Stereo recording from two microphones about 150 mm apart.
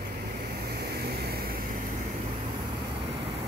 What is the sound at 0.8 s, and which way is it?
Vehicle, 90° right.